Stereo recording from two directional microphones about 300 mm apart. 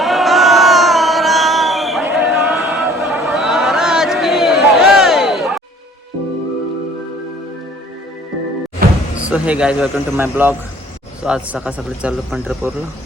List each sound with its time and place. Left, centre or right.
0.0 s a sound: centre
8.8 s music: right
9.3 s speech: centre